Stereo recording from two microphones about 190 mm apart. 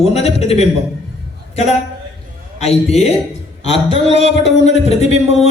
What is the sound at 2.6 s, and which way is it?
A man's voice, 35° left (ahead or behind).